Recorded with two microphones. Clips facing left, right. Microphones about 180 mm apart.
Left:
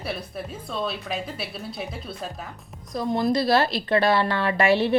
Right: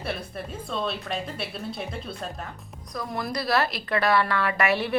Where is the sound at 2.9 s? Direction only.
25° left (ahead or behind).